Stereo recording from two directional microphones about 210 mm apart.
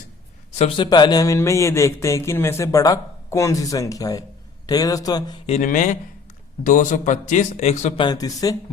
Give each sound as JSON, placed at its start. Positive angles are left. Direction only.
{"t": 0.6, "sound": "speech", "side_deg": 20}
{"t": 5.5, "sound": "speech", "side_deg": 35}
{"t": 8.0, "sound": "speech", "side_deg": 20}